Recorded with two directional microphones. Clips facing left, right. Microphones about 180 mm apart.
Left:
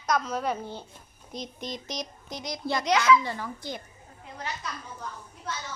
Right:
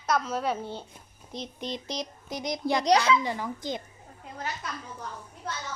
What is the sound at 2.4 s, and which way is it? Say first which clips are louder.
Speech: right 3 dB; 20° right (ahead or behind).